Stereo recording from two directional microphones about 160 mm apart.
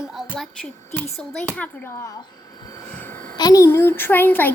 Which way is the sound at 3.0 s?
10° left (ahead or behind).